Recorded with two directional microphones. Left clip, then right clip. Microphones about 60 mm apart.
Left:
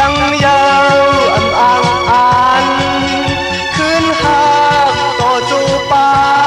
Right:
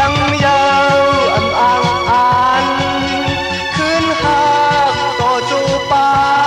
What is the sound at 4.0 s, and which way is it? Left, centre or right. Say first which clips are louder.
Music: left 2 dB; left.